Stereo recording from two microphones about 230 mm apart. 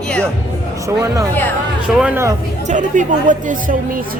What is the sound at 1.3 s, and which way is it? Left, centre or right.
Speech, centre.